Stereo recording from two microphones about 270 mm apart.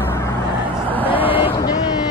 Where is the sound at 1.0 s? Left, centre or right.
Centre.